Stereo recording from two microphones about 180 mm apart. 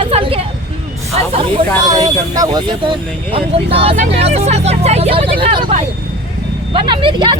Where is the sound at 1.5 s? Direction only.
25° right (ahead or behind).